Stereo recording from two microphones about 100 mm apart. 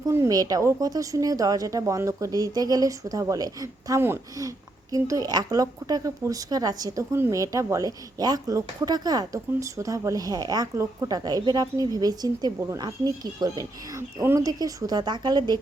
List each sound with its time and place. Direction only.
0.3 s speech: 40° right (ahead or behind)
10.8 s a woman's voice: 30° right (ahead or behind)
11.2 s speech: 40° right (ahead or behind)
14.2 s a woman's voice: 25° right (ahead or behind)
14.4 s a woman's voice: 40° right (ahead or behind)